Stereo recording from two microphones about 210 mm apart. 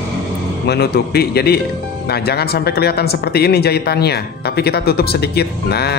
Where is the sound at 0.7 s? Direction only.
50° left (ahead or behind).